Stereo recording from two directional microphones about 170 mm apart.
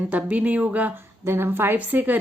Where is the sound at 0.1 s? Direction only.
10° right (ahead or behind).